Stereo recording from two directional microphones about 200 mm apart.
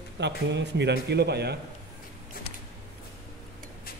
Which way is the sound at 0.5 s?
60° right (ahead or behind).